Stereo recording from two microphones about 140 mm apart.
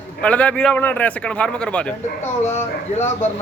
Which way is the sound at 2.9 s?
55° left (ahead or behind).